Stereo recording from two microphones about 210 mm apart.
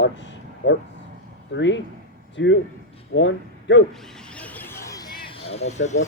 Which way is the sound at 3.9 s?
Centre (ahead or behind).